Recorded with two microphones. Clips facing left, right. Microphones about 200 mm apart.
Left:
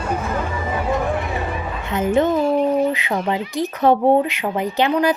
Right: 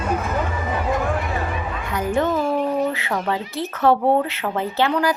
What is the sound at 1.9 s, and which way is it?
A woman's voice, 20° left (ahead or behind).